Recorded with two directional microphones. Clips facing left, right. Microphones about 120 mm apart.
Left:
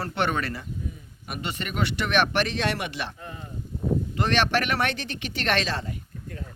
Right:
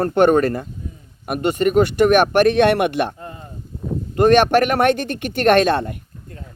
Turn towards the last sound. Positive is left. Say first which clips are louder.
# right 12 dB
turn(degrees=-60)  # may be behind; listen again after turning